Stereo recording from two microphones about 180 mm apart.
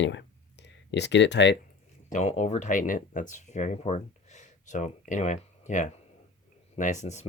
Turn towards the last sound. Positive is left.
turn(degrees=40)  # may be behind; listen again after turning